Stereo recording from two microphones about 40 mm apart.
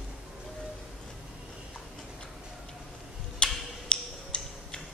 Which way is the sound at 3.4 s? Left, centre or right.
Left.